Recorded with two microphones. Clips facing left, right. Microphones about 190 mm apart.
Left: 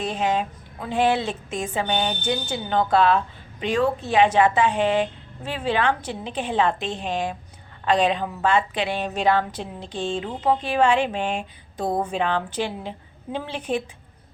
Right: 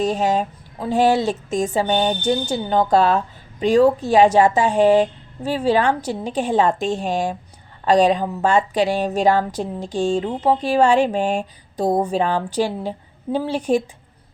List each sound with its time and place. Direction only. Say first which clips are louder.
0.0 s a woman's voice: right 5 dB; 40° right (ahead or behind)